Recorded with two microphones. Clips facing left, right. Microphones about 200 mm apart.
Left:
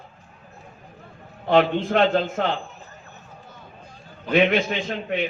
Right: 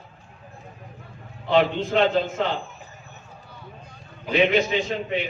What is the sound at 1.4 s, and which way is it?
Speech, 50° left (ahead or behind).